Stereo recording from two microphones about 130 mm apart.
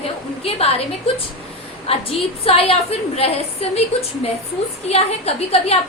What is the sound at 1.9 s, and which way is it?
A woman's voice, 50° left (ahead or behind).